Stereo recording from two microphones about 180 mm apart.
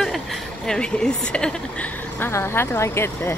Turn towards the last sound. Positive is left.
turn(degrees=15)  # may be behind; listen again after turning